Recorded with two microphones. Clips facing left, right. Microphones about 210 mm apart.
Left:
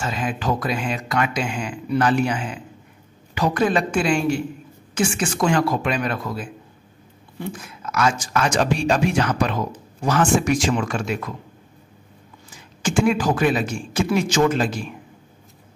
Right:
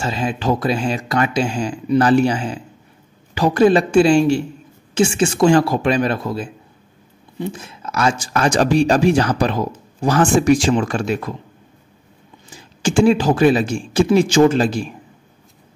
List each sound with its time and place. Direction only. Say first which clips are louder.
0.0 s speech: right 4 dB; 30° right (ahead or behind)
12.4 s speech: right 5 dB; 30° right (ahead or behind)